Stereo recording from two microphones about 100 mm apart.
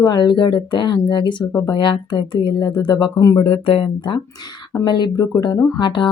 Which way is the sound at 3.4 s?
70° left (ahead or behind).